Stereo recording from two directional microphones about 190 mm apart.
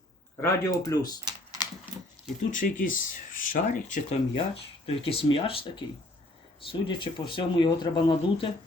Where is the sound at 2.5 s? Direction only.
45° left (ahead or behind).